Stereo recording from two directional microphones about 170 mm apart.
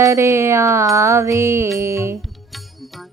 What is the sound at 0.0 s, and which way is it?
Mantra, 15° right (ahead or behind).